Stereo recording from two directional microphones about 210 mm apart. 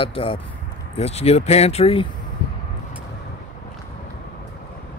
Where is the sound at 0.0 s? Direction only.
25° left (ahead or behind).